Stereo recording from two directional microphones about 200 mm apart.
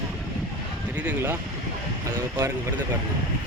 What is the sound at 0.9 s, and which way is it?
Speech, 10° right (ahead or behind).